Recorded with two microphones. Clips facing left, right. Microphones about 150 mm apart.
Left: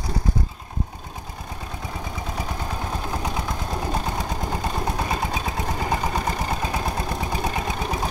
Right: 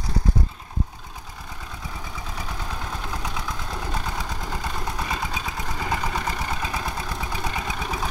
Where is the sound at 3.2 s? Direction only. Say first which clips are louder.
Left 4 dB; 40° left (ahead or behind).